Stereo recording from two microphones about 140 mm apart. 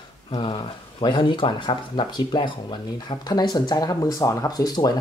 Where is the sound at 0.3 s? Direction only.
35° left (ahead or behind).